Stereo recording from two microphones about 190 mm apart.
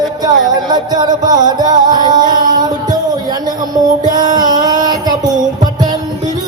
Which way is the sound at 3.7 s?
20° right (ahead or behind).